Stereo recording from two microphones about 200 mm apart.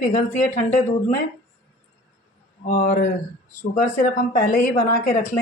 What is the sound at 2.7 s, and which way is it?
Speech, 40° left (ahead or behind).